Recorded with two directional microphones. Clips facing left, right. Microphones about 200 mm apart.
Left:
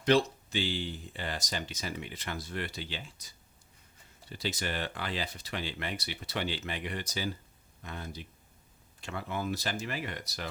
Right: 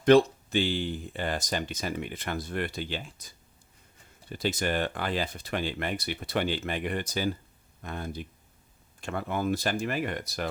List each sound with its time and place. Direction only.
0.0 s speech: 55° right (ahead or behind)